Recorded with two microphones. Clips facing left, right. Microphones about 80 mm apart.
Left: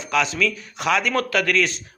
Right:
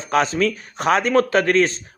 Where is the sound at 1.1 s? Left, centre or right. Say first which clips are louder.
Right 5 dB; right.